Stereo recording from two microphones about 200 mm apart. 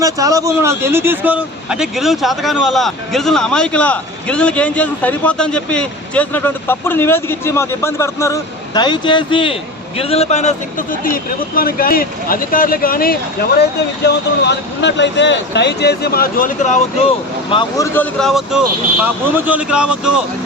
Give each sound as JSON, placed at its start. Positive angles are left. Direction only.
{"t": 0.0, "sound": "a man's voice", "side_deg": -15}
{"t": 14.1, "sound": "speech", "side_deg": 60}
{"t": 17.5, "sound": "speech", "side_deg": 25}
{"t": 17.9, "sound": "speech", "side_deg": 5}